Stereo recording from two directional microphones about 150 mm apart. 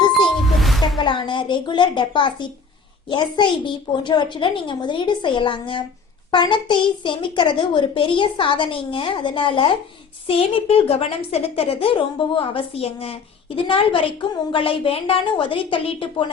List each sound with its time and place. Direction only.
0.4 s ding: centre (ahead or behind)
0.9 s a child's voice: 30° left (ahead or behind)